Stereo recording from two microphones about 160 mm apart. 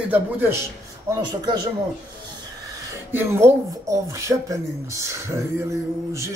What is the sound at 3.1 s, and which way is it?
A man's voice, 15° right (ahead or behind).